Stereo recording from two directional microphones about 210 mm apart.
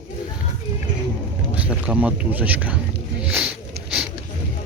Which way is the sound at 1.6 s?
5° right (ahead or behind).